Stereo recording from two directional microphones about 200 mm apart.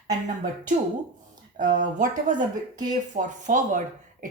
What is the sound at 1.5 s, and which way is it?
Speech, 40° right (ahead or behind).